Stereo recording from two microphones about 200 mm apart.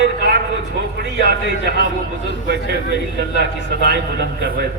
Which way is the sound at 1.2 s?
60° right (ahead or behind).